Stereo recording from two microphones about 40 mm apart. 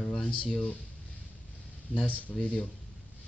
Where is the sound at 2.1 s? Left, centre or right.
Left.